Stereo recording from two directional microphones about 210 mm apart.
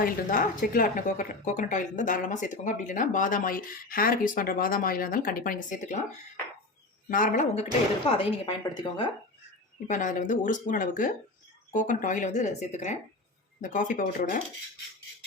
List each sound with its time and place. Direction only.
0.0 s a woman's voice: 40° left (ahead or behind)
7.1 s a woman's voice: 40° left (ahead or behind); by 9.0 s 20° left (ahead or behind)
9.8 s a woman's voice: 35° left (ahead or behind)